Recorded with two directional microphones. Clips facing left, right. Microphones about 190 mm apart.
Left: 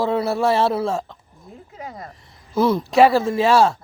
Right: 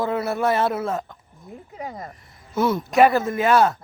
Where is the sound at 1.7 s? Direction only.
20° right (ahead or behind).